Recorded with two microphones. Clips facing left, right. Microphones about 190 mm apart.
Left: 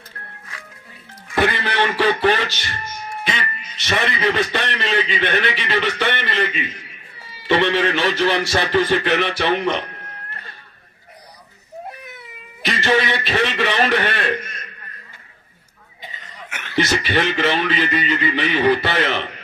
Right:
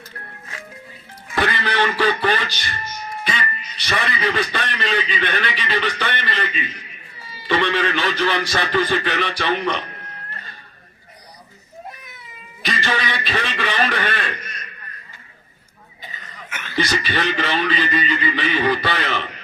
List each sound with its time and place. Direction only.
1.4 s a man's voice: 25° left (ahead or behind)
12.6 s a sound: 25° left (ahead or behind)
16.5 s chuckle: 65° left (ahead or behind)
17.1 s a man's voice: 25° left (ahead or behind)